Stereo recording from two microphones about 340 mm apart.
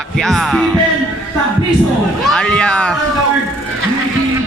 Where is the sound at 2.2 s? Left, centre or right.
Centre.